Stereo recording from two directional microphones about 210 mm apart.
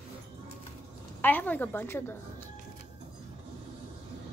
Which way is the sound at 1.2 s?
10° left (ahead or behind).